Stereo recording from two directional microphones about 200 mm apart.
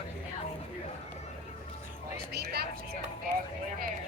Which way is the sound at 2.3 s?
50° right (ahead or behind).